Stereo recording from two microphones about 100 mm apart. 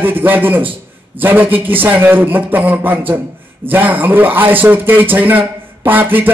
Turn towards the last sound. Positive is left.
turn(degrees=-20)  # may be behind; listen again after turning